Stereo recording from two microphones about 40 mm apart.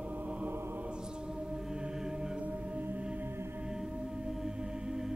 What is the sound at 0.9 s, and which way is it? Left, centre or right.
Mantra, right.